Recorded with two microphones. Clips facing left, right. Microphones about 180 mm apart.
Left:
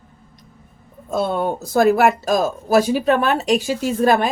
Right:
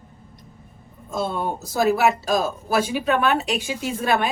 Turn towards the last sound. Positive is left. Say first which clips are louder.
# left 6 dB
turn(degrees=40)  # may be behind; listen again after turning